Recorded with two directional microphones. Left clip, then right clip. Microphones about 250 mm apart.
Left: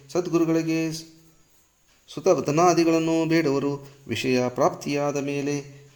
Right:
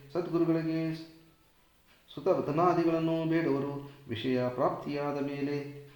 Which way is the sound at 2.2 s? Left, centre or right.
Left.